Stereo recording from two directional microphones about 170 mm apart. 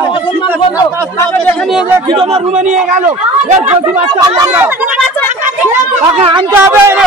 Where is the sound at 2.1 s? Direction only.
35° right (ahead or behind).